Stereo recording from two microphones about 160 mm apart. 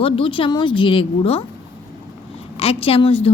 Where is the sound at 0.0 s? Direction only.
35° left (ahead or behind).